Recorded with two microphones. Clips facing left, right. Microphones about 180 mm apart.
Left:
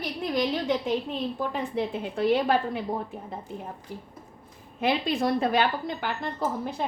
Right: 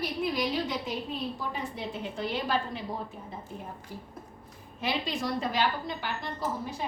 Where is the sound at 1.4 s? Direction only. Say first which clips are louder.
Left 7 dB; 55° left (ahead or behind).